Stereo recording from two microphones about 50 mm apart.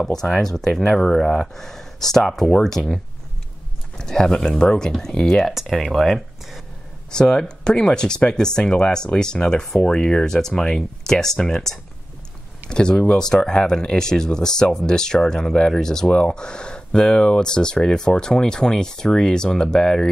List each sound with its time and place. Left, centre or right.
0.0 s speech: centre
4.0 s speech: centre
5.5 s speech: centre
7.1 s speech: centre